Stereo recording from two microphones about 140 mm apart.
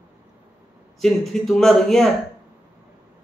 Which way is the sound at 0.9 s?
Centre (ahead or behind).